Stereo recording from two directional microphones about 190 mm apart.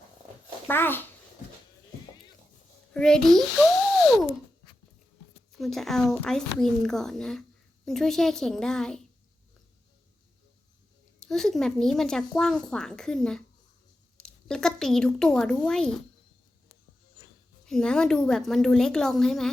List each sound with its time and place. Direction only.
0.7 s a child's voice: 10° left (ahead or behind)
2.9 s speech: 5° left (ahead or behind)
5.5 s speech: centre (ahead or behind)
11.2 s speech: centre (ahead or behind)
17.7 s speech: 5° left (ahead or behind)